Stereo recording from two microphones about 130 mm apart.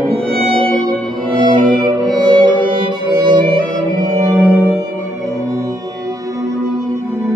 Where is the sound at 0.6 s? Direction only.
35° right (ahead or behind).